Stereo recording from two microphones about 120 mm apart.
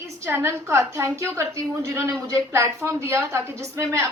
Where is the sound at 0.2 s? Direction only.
20° right (ahead or behind).